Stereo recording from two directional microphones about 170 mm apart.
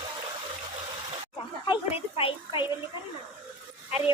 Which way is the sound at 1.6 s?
30° left (ahead or behind).